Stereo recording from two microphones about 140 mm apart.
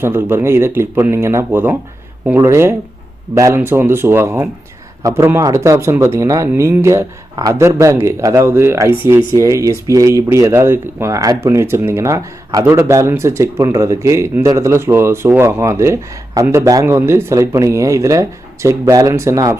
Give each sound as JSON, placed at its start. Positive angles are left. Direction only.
{"t": 0.0, "sound": "speech", "side_deg": -15}